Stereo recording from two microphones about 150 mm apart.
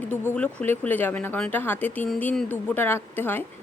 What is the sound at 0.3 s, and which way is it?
Speech, 10° left (ahead or behind).